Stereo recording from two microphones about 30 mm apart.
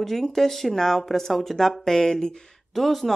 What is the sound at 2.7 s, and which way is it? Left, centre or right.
Speech, centre.